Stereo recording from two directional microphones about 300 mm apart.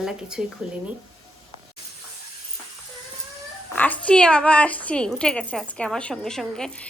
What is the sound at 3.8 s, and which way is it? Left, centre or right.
A woman's voice, centre.